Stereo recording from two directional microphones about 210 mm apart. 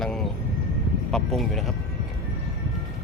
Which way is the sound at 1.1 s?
Centre (ahead or behind).